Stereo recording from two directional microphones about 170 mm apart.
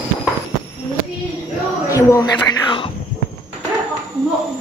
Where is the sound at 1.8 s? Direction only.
20° left (ahead or behind).